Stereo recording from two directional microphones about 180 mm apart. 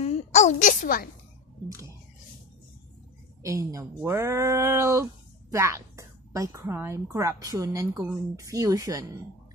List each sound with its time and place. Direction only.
0.0 s babbling: 35° left (ahead or behind)
3.4 s a woman's voice: 20° right (ahead or behind)